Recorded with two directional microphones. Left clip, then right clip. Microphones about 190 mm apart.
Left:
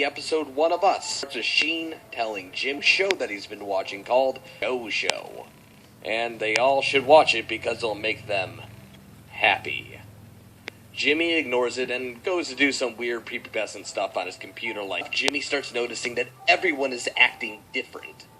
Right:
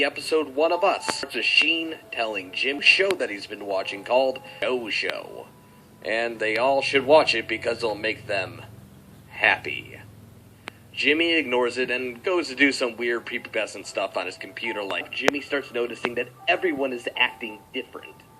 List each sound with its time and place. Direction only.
0.0 s chopping: 40° right (ahead or behind)
9.3 s speech: 40° right (ahead or behind)
10.7 s chopping: 40° right (ahead or behind)
15.4 s speech: 35° right (ahead or behind)